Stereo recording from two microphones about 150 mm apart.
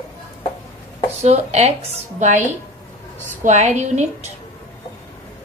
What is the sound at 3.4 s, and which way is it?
Speech, 50° right (ahead or behind).